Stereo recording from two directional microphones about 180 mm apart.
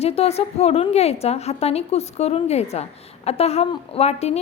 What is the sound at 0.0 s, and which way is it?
A woman's voice, 35° left (ahead or behind).